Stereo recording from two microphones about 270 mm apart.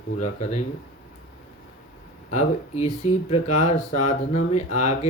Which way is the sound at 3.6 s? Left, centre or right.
Left.